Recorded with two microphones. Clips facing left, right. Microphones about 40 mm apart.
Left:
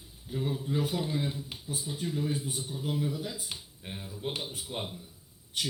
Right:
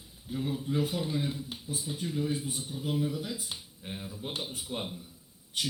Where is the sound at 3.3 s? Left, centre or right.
Left.